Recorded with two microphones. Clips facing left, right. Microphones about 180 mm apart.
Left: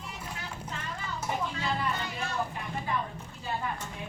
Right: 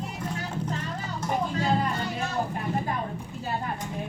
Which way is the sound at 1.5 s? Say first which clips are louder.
Right 6 dB; 40° right (ahead or behind).